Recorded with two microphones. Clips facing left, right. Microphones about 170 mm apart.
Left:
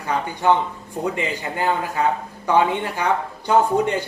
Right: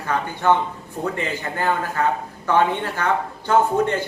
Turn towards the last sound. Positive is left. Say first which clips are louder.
# even
turn(degrees=15)  # may be behind; listen again after turning